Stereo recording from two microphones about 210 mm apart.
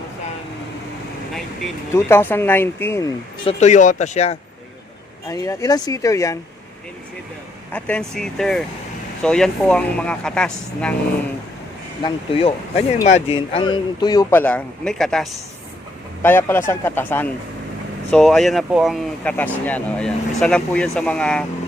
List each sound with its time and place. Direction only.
1.3 s vehicle: centre (ahead or behind)
1.9 s speech: 10° left (ahead or behind)
3.4 s speech: 35° left (ahead or behind)
5.3 s speech: 15° left (ahead or behind)
7.7 s speech: 5° left (ahead or behind)
12.0 s speech: 25° left (ahead or behind); by 21.4 s 5° left (ahead or behind)